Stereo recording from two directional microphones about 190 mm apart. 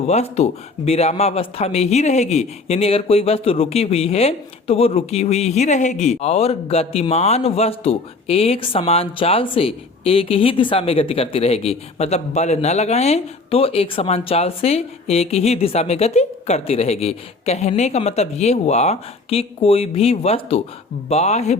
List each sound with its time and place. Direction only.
0.1 s speech: 35° left (ahead or behind)